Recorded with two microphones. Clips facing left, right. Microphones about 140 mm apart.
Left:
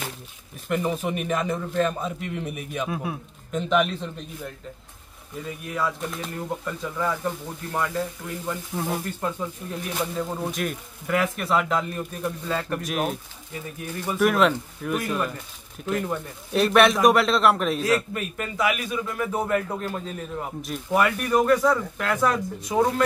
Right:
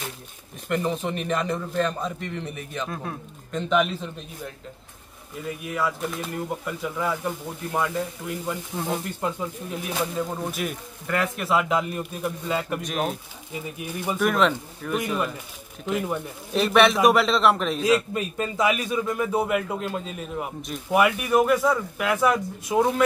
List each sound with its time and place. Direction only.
0.7 s a man's voice: 5° left (ahead or behind)
5.6 s speech: 5° right (ahead or behind)
8.7 s speech: 5° left (ahead or behind)
9.2 s speech: 10° right (ahead or behind)
12.8 s speech: centre (ahead or behind)
13.5 s speech: 15° right (ahead or behind)
14.1 s speech: 5° left (ahead or behind)
17.8 s a man's voice: 20° right (ahead or behind)
19.3 s speech: 10° right (ahead or behind)